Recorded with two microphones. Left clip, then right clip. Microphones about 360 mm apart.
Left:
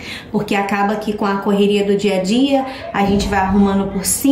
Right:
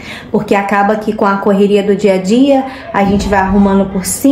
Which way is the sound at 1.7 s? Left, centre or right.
Centre.